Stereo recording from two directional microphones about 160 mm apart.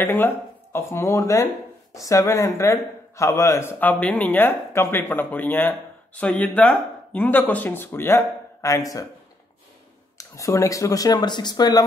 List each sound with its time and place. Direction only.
0.0 s a man's voice: 15° left (ahead or behind)
10.1 s speech: 20° left (ahead or behind)